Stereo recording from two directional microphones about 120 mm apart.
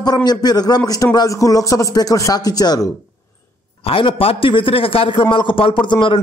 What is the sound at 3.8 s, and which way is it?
A man's voice, 50° left (ahead or behind).